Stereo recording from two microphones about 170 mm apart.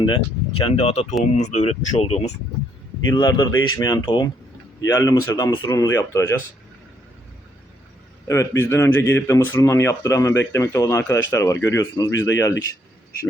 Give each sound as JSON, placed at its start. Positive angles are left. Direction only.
{"t": 0.0, "sound": "speech", "side_deg": 30}
{"t": 3.1, "sound": "speech", "side_deg": 25}
{"t": 8.3, "sound": "speech", "side_deg": 15}